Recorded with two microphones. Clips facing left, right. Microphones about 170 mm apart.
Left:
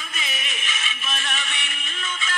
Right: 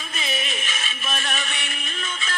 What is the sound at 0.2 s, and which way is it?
Music, 35° right (ahead or behind).